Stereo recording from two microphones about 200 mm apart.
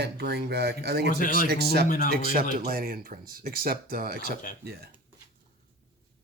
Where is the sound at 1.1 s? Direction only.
40° left (ahead or behind).